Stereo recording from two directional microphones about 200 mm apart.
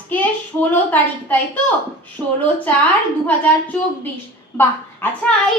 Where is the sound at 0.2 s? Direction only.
10° left (ahead or behind).